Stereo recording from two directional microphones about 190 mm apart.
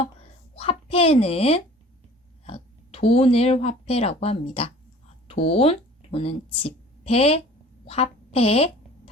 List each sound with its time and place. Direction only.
0.5 s a child's voice: 30° left (ahead or behind)